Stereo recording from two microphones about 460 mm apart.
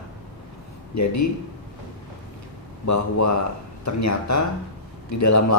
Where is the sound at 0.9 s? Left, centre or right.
Left.